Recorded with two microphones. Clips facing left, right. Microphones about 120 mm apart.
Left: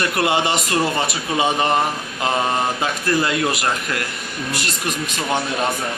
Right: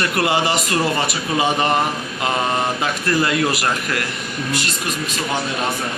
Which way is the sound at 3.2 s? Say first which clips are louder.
Right 1 dB; 25° left (ahead or behind).